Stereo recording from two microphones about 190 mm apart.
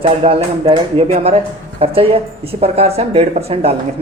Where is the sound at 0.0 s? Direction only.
30° right (ahead or behind).